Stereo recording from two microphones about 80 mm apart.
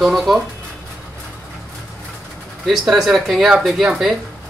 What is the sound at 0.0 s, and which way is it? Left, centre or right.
Speech, centre.